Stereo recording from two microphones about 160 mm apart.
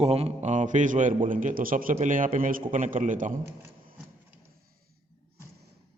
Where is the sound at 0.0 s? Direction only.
40° right (ahead or behind).